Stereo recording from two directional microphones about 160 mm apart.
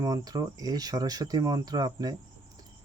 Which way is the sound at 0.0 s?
20° right (ahead or behind).